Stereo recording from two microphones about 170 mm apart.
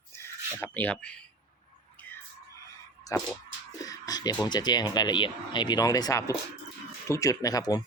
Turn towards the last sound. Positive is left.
turn(degrees=20)  # may be behind; listen again after turning